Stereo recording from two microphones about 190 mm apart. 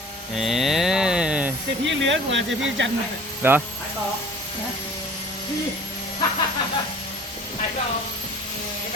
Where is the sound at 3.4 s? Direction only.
10° right (ahead or behind).